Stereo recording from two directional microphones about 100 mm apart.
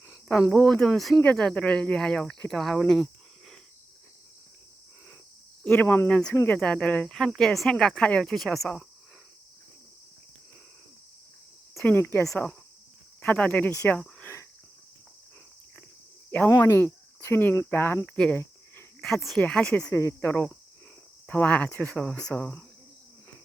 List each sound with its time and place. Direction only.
0.5 s speech: 5° left (ahead or behind)
5.6 s speech: 20° left (ahead or behind)
6.1 s speech: 10° left (ahead or behind)
11.8 s speech: 25° left (ahead or behind)
13.2 s speech: 10° left (ahead or behind)
14.2 s cricket: 25° left (ahead or behind)
16.6 s speech: 25° left (ahead or behind)
19.0 s speech: centre (ahead or behind)
19.9 s speech: 35° left (ahead or behind)
20.2 s speech: 15° left (ahead or behind)